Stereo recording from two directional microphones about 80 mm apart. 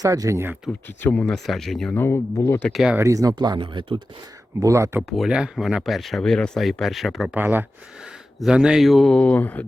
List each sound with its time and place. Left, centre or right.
0.0 s speech: right
0.7 s speech: left
1.1 s speech: centre
1.5 s speech: centre
1.9 s speech: left
3.0 s speech: right
3.3 s speech: right
4.6 s speech: right
5.0 s speech: centre
7.3 s speech: right
8.4 s speech: centre
9.1 s speech: centre